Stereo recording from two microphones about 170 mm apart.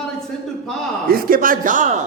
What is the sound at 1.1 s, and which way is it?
Speech, 55° right (ahead or behind).